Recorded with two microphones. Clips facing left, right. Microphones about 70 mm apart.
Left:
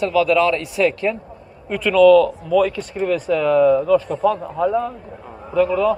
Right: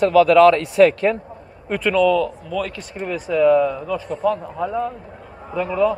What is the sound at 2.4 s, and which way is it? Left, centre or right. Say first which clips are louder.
Speech: left 8 dB; centre.